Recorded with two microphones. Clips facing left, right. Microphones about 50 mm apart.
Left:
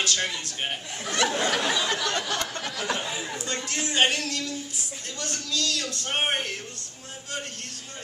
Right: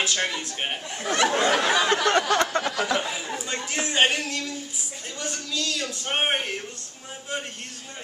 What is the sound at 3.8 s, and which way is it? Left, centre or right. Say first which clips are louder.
A man's voice: right 1 dB; centre.